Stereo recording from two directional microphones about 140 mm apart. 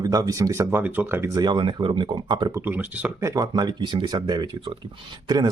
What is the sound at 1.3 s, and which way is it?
Speech, 30° right (ahead or behind).